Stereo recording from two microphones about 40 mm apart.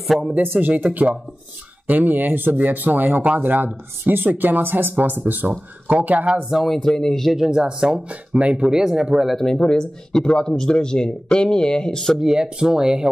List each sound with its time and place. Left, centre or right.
0.4 s speech: right
0.8 s speech: right
1.9 s speech: right
5.9 s speech: right
6.5 s a man's voice: centre
6.8 s a man's voice: centre
7.3 s speech: centre
8.4 s speech: right
8.6 s speech: centre
9.6 s speech: centre
12.2 s speech: centre